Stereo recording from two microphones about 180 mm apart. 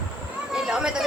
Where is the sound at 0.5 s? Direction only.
5° right (ahead or behind).